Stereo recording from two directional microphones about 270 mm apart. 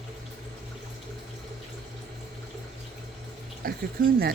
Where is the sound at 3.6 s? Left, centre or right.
Right.